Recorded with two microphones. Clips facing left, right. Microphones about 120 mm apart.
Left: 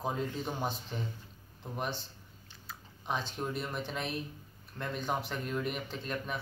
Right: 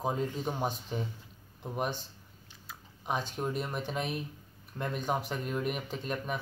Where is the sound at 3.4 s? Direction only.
15° right (ahead or behind).